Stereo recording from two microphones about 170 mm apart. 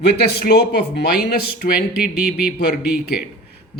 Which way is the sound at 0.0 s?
70° left (ahead or behind).